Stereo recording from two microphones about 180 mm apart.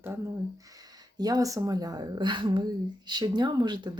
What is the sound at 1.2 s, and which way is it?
Speech, 20° right (ahead or behind).